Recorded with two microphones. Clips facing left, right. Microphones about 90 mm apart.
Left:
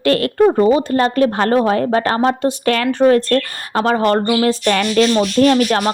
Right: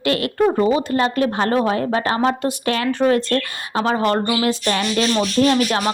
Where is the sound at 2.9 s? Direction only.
40° left (ahead or behind).